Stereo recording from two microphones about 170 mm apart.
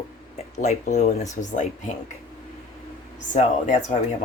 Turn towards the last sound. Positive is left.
turn(degrees=45)  # may be behind; listen again after turning